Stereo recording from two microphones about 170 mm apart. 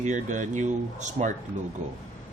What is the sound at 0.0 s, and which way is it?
A man's voice, 45° right (ahead or behind).